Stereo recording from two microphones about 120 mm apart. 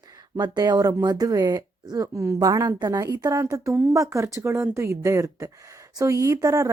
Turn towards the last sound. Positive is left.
turn(degrees=-30)  # may be behind; listen again after turning